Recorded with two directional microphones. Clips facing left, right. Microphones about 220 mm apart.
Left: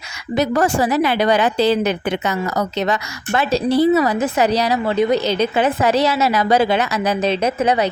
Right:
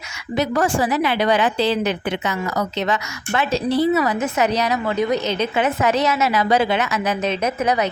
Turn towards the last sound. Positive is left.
turn(degrees=30)  # may be behind; listen again after turning